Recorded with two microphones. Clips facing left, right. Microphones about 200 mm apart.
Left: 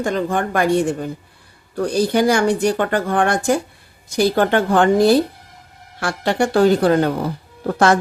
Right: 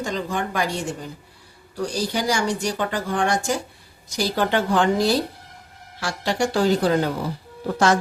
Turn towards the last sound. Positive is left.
turn(degrees=55)  # may be behind; listen again after turning